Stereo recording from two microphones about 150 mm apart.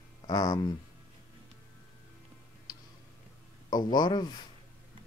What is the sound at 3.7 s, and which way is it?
Speech, 25° left (ahead or behind).